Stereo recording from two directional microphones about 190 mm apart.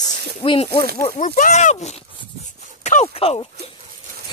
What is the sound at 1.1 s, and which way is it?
Speech, 40° left (ahead or behind).